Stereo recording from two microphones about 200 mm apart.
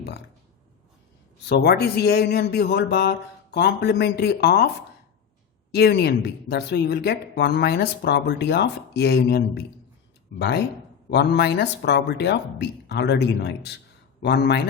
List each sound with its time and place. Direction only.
1.5 s a woman's voice: 55° left (ahead or behind)
5.7 s a woman's voice: 55° left (ahead or behind)